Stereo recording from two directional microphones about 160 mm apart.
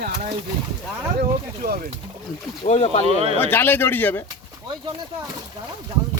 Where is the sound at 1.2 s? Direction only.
70° right (ahead or behind).